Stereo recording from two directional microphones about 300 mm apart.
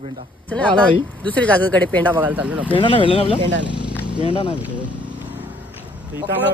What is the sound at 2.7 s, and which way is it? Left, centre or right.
Speech, centre.